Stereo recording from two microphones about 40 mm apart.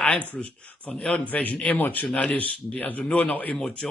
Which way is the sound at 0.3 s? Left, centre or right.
Left.